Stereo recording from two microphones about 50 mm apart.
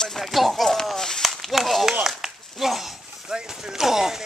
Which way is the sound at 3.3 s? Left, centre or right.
Centre.